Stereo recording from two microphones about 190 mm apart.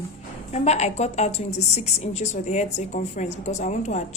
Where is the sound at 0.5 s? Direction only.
35° left (ahead or behind).